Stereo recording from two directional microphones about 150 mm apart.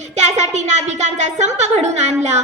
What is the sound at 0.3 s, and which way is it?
A woman's voice, 50° right (ahead or behind).